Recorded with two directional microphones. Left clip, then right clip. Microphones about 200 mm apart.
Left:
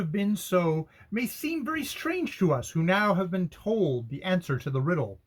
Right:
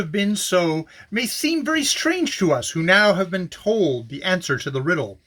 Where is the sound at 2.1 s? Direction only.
10° right (ahead or behind).